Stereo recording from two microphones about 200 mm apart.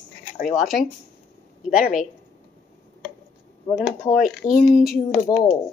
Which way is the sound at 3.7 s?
5° right (ahead or behind).